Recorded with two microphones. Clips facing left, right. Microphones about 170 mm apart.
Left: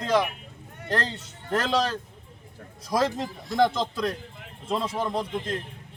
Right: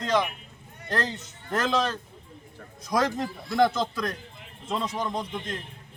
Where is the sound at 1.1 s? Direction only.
30° left (ahead or behind).